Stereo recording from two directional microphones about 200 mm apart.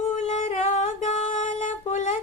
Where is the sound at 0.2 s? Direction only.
35° left (ahead or behind).